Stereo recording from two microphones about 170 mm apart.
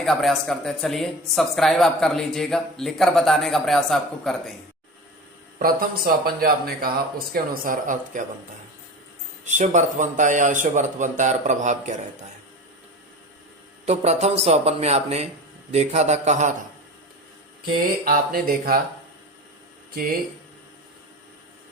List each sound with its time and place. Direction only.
0.0 s speech: centre (ahead or behind)
5.5 s a man's voice: 55° right (ahead or behind)
9.4 s a man's voice: 45° right (ahead or behind)
13.8 s a man's voice: 40° right (ahead or behind)
18.0 s speech: 55° right (ahead or behind)
19.9 s speech: 55° right (ahead or behind)